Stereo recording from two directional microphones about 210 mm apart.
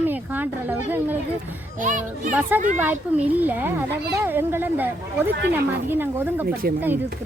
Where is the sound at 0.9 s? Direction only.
10° right (ahead or behind).